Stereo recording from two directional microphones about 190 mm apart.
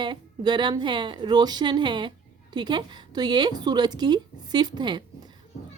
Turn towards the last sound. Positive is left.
turn(degrees=-20)  # may be behind; listen again after turning